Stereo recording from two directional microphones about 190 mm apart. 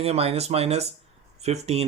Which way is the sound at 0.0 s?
35° right (ahead or behind).